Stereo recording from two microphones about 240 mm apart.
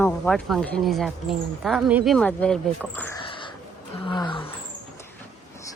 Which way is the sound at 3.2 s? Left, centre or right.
Left.